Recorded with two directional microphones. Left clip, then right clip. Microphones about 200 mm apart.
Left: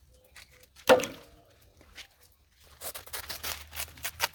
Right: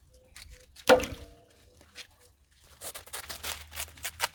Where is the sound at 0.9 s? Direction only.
5° right (ahead or behind).